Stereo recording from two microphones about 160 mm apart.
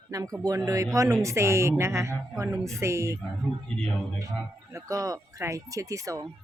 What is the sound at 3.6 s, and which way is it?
Speech, 5° left (ahead or behind).